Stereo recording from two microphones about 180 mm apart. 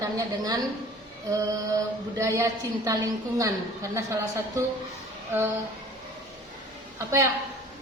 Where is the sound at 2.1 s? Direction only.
15° right (ahead or behind).